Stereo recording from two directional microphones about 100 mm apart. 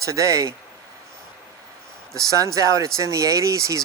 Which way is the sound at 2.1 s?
35° right (ahead or behind).